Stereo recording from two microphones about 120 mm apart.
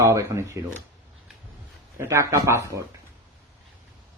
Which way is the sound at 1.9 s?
25° right (ahead or behind).